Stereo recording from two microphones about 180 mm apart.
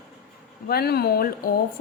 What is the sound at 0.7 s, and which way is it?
Speech, 60° left (ahead or behind).